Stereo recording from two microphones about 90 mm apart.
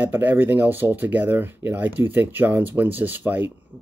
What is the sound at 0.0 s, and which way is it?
Speech, 20° right (ahead or behind).